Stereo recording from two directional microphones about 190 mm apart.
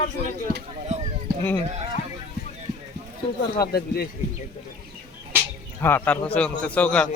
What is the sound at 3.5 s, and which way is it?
Speech, 55° left (ahead or behind).